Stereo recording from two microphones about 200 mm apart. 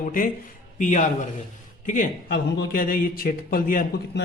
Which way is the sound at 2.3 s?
50° left (ahead or behind).